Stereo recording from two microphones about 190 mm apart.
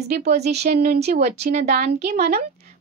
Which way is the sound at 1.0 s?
35° right (ahead or behind).